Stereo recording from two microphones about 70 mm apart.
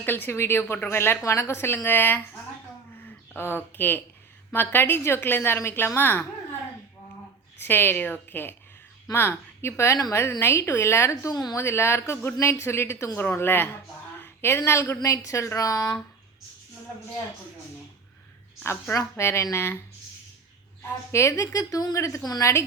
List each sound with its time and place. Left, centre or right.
0.0 s a woman's voice: left
1.2 s a woman's voice: left
3.3 s a woman's voice: left
7.6 s a woman's voice: left
11.3 s speech: left
11.5 s a woman's voice: left
18.6 s a woman's voice: left
21.1 s a woman's voice: left